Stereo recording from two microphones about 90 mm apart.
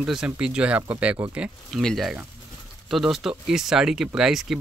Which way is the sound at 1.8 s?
Centre (ahead or behind).